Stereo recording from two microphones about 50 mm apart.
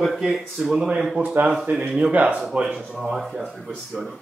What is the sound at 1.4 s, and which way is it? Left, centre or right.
Speech, right.